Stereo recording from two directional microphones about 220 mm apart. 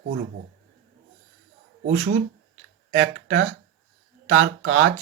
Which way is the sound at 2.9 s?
55° right (ahead or behind).